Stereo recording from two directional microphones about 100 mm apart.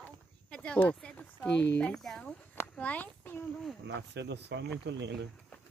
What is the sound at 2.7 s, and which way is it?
Speech, 15° left (ahead or behind).